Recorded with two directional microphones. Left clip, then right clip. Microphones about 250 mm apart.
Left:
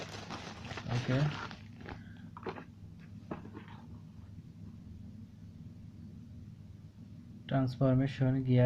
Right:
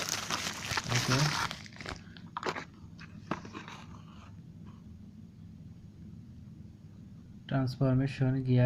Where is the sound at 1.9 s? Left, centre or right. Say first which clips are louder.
Right 7 dB; right.